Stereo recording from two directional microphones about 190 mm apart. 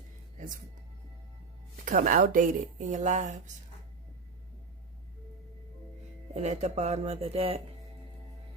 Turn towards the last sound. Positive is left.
turn(degrees=-30)  # may be behind; listen again after turning